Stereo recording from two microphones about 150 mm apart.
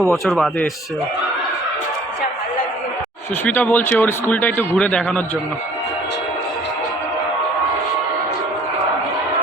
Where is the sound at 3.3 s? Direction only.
10° left (ahead or behind).